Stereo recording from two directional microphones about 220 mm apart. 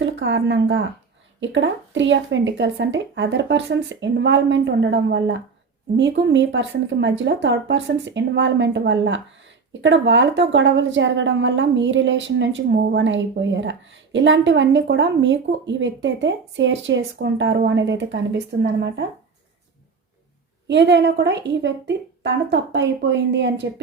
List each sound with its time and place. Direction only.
0.0 s a woman's voice: 55° right (ahead or behind)
20.7 s a woman's voice: 55° right (ahead or behind)